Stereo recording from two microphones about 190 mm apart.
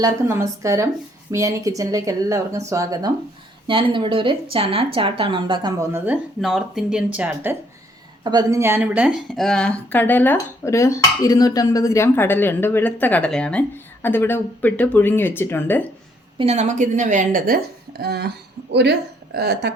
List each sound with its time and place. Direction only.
0.0 s speech: 15° right (ahead or behind)
6.1 s speech: centre (ahead or behind)
8.2 s a woman's voice: 20° right (ahead or behind); by 15.9 s 10° left (ahead or behind)
16.4 s a woman's voice: 35° right (ahead or behind)
18.0 s speech: 60° right (ahead or behind)